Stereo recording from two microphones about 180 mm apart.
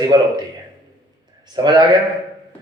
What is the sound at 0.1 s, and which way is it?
Speech, 25° right (ahead or behind).